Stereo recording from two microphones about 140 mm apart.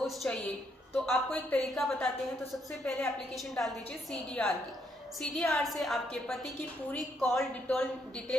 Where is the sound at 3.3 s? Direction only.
Centre (ahead or behind).